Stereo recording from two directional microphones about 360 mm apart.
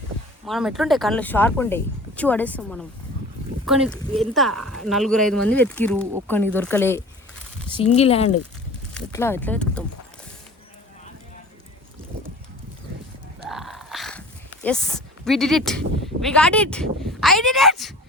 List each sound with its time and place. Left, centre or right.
0.4 s speech: centre
7.7 s speech: centre
9.0 s speech: centre
13.5 s a sound: centre
14.6 s speech: centre